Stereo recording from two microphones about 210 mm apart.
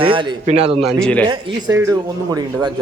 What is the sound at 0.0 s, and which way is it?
Speech, 25° right (ahead or behind).